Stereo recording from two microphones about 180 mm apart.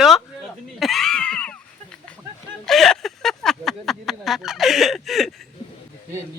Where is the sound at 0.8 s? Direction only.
Centre (ahead or behind).